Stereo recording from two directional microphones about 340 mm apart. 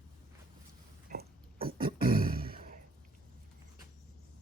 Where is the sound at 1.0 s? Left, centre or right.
Right.